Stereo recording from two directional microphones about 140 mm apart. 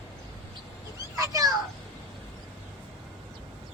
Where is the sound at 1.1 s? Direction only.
25° right (ahead or behind).